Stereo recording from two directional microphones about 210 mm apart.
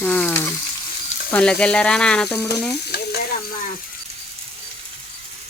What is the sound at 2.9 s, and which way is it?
Stir, 50° left (ahead or behind).